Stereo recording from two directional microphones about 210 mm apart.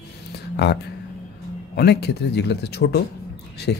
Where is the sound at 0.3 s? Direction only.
50° left (ahead or behind).